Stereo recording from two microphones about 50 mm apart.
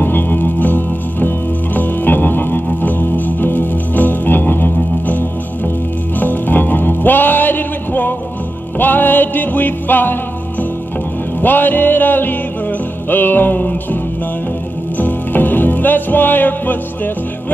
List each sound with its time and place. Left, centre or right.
0.0 s music: left
11.4 s music: left
15.0 s music: left